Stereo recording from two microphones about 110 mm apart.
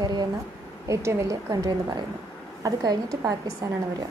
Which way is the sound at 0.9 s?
25° right (ahead or behind).